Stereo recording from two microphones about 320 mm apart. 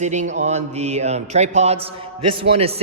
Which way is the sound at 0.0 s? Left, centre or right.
Right.